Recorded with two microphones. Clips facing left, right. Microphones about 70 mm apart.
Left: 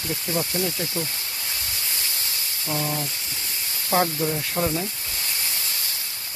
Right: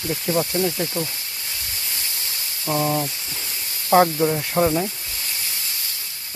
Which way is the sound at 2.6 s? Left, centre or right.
Right.